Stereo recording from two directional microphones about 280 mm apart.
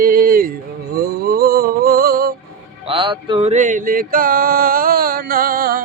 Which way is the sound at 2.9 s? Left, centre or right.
Centre.